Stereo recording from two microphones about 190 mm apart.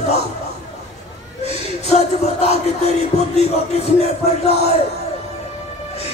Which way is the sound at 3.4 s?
35° left (ahead or behind).